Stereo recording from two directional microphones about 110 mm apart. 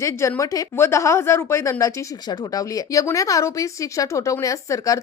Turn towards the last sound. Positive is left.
turn(degrees=30)  # may be behind; listen again after turning